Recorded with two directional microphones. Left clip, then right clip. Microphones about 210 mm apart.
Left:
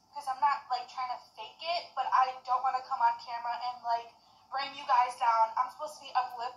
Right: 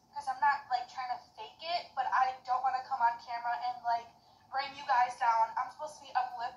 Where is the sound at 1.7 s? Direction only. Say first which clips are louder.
Left 3 dB; 35° left (ahead or behind).